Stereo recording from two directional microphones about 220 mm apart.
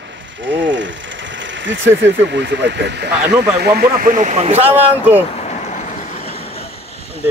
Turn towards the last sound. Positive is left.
turn(degrees=25)  # may be behind; listen again after turning